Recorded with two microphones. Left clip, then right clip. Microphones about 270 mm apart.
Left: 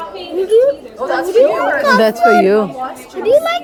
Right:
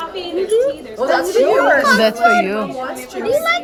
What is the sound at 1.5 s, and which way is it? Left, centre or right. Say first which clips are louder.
Speech: right 2 dB; right.